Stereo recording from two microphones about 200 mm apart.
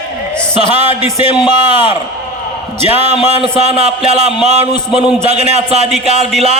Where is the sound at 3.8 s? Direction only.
30° right (ahead or behind).